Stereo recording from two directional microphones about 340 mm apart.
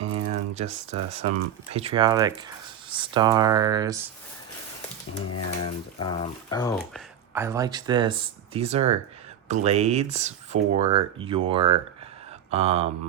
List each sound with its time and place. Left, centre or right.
0.0 s a sound: right
1.7 s speech: centre
5.1 s speech: left
6.0 s speech: centre
7.3 s speech: centre